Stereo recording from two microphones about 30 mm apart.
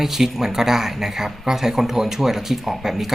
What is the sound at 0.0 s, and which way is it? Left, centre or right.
Speech, centre.